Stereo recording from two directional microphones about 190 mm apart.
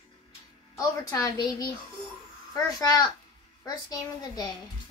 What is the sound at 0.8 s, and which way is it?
Speech, 15° left (ahead or behind).